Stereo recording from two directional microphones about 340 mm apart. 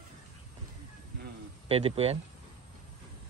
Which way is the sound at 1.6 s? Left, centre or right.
Centre.